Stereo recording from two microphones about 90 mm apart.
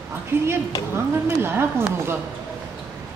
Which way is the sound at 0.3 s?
25° right (ahead or behind).